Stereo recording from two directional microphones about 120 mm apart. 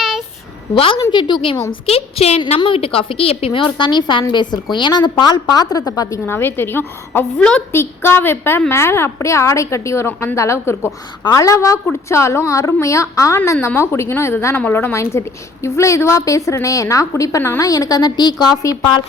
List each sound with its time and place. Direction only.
0.7 s a woman's voice: 45° left (ahead or behind)
1.9 s a woman's voice: 55° left (ahead or behind); by 6.1 s 30° left (ahead or behind)
6.2 s a woman's voice: 20° left (ahead or behind)
7.7 s a woman's voice: 20° left (ahead or behind); by 19.0 s 35° left (ahead or behind)